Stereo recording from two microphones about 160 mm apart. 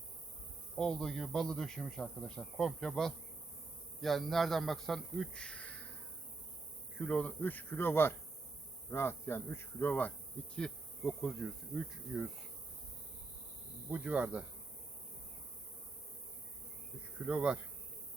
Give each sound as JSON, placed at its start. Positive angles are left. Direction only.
{"t": 0.8, "sound": "speech", "side_deg": 5}
{"t": 7.0, "sound": "speech", "side_deg": 10}
{"t": 13.9, "sound": "speech", "side_deg": -10}
{"t": 17.2, "sound": "speech", "side_deg": -5}